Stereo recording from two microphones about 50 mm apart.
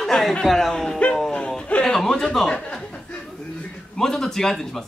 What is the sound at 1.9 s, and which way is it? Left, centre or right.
A man's voice, centre.